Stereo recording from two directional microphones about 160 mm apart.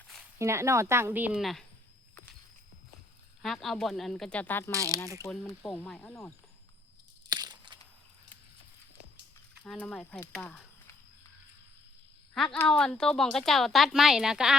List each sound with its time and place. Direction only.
0.3 s speech: 15° right (ahead or behind); by 1.6 s centre (ahead or behind)
3.4 s speech: centre (ahead or behind)
4.7 s speech: 20° right (ahead or behind)
5.2 s speech: 20° left (ahead or behind)
5.6 s speech: 5° left (ahead or behind)
7.3 s a sound: 25° right (ahead or behind)
9.6 s speech: 10° left (ahead or behind)
12.3 s speech: 5° left (ahead or behind)